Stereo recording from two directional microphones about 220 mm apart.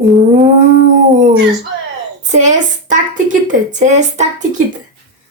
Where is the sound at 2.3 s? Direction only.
35° right (ahead or behind).